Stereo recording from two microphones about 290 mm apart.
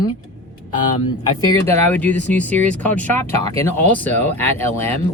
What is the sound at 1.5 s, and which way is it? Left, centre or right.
Speech, centre.